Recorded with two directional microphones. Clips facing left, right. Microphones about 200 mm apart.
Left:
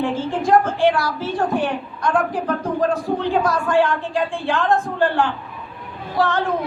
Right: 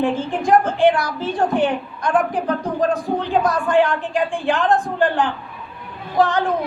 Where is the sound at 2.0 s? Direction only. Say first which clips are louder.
Right 1 dB; 20° right (ahead or behind).